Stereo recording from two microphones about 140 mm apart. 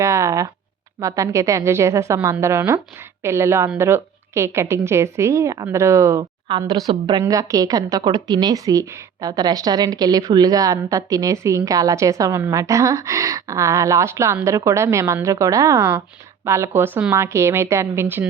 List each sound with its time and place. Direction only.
0.0 s a woman's voice: 20° right (ahead or behind)